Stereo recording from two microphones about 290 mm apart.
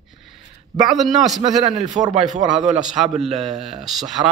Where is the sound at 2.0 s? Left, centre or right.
Centre.